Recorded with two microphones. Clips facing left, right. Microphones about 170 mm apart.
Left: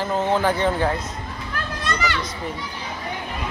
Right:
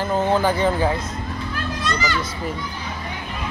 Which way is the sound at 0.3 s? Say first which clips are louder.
Right 1 dB; centre (ahead or behind).